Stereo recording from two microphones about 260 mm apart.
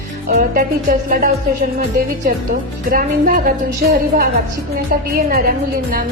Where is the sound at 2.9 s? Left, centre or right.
Right.